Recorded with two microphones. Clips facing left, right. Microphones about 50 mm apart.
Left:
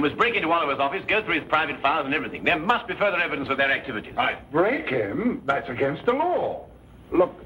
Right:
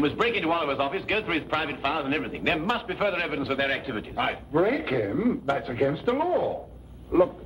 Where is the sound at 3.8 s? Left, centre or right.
Left.